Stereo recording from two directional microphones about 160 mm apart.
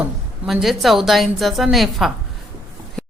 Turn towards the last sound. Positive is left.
turn(degrees=5)  # may be behind; listen again after turning